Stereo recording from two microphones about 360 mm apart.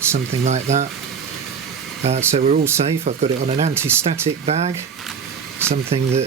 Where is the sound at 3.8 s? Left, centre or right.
Centre.